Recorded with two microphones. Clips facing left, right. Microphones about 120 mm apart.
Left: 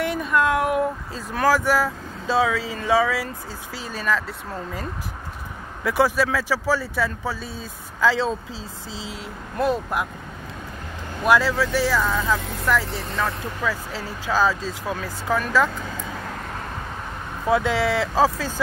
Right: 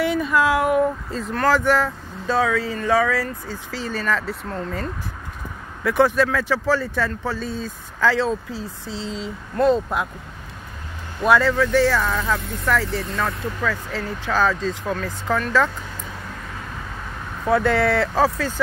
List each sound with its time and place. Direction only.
0.0 s a sound: centre (ahead or behind)
1.3 s speech: 10° left (ahead or behind)
5.9 s speech: 10° left (ahead or behind)
11.2 s speech: 5° left (ahead or behind)
17.5 s speech: 15° left (ahead or behind)